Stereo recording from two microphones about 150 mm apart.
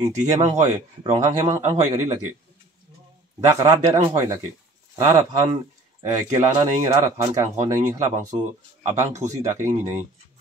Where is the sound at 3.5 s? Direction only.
20° right (ahead or behind).